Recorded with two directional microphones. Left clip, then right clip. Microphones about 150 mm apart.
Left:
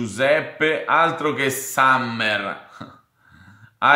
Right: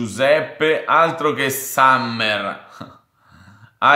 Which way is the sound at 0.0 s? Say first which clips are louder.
Right 3 dB; 20° right (ahead or behind).